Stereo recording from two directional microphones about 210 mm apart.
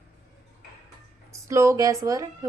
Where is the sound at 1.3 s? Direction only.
15° right (ahead or behind).